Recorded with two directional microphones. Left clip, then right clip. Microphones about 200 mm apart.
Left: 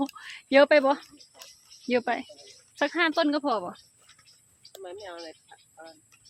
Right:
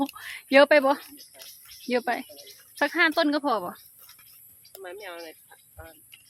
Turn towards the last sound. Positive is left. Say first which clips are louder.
# right 1 dB
turn(degrees=-30)  # may be behind; listen again after turning